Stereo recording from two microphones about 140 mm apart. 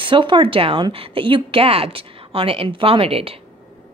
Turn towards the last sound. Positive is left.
turn(degrees=-45)  # may be behind; listen again after turning